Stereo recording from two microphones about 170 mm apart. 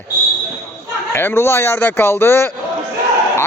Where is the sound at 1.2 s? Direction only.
15° left (ahead or behind).